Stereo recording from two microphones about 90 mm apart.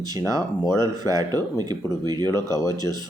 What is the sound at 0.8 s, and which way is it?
Speech, 40° right (ahead or behind).